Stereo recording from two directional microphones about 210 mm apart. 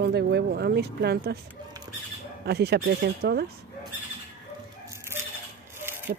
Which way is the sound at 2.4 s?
50° right (ahead or behind).